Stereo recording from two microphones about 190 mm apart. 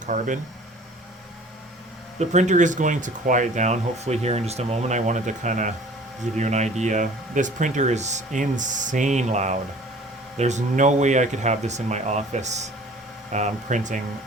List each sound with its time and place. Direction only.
0.0 s speech: 40° right (ahead or behind)
2.1 s speech: 40° right (ahead or behind)